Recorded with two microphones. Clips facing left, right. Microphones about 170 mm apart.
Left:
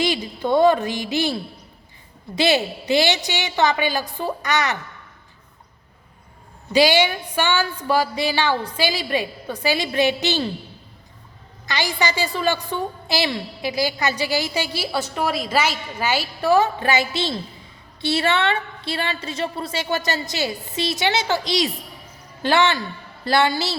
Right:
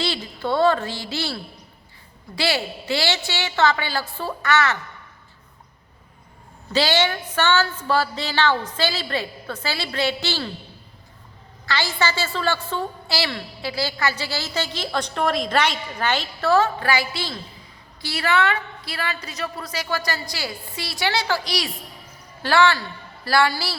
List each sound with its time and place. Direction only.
0.0 s a woman's voice: 15° left (ahead or behind)
6.7 s a woman's voice: 15° left (ahead or behind)
11.6 s a woman's voice: 15° left (ahead or behind)